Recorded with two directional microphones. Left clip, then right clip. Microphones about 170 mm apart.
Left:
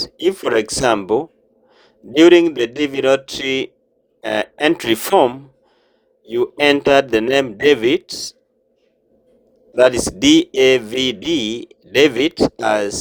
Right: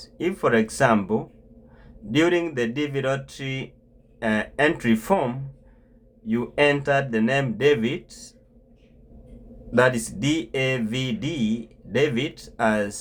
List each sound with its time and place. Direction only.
0.0 s speech: 45° left (ahead or behind)
6.2 s speech: 45° left (ahead or behind)
9.7 s speech: 45° left (ahead or behind)